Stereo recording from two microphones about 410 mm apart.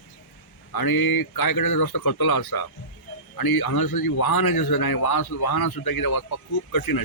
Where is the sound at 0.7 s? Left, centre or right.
Left.